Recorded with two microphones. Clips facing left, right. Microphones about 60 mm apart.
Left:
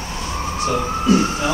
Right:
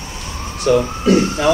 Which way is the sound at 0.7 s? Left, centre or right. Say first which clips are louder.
Right 4 dB; right.